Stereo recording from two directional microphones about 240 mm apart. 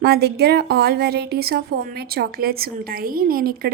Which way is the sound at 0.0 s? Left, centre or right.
Right.